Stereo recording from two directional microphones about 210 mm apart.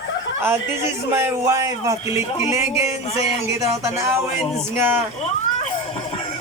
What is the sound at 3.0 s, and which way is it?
Speech, 30° left (ahead or behind).